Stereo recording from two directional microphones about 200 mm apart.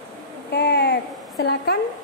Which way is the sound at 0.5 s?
55° left (ahead or behind).